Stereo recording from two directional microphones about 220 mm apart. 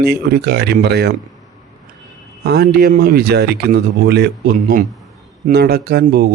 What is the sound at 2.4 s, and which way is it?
Speech, 45° right (ahead or behind).